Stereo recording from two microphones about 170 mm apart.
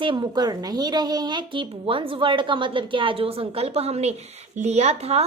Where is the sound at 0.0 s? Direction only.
30° right (ahead or behind).